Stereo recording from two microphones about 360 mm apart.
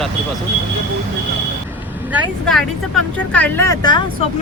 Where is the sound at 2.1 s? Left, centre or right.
Centre.